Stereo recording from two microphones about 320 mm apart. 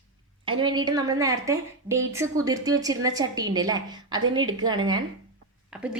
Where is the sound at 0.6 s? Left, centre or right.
Centre.